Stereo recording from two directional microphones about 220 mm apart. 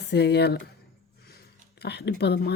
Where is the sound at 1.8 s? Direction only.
50° left (ahead or behind).